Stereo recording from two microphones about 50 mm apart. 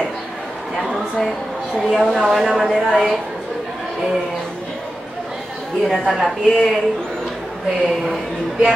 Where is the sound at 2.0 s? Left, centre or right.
Centre.